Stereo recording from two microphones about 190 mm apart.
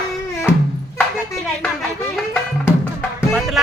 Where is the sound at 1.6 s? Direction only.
Centre (ahead or behind).